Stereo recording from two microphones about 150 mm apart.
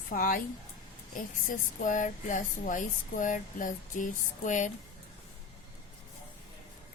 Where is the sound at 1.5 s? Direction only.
60° left (ahead or behind).